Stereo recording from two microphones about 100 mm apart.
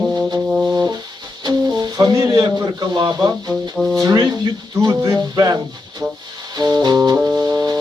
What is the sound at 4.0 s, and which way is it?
Speech, 40° right (ahead or behind).